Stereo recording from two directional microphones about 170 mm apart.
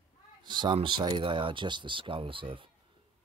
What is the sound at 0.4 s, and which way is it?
Speech, 25° right (ahead or behind).